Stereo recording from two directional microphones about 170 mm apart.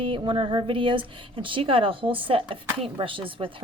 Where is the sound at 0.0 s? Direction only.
30° right (ahead or behind).